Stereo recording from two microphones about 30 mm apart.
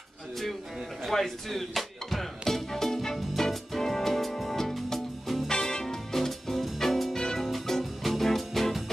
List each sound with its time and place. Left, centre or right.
1.0 s music: centre
5.5 s music: left
6.1 s music: centre